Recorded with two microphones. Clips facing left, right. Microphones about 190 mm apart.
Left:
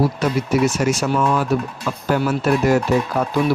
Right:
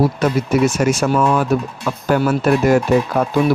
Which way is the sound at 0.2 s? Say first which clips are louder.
Right 2 dB; 50° right (ahead or behind).